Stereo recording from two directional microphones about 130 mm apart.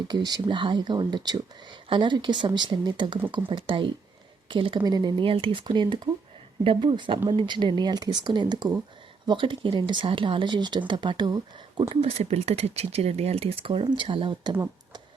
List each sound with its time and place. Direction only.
0.1 s speech: 35° right (ahead or behind)
11.9 s speech: 55° right (ahead or behind)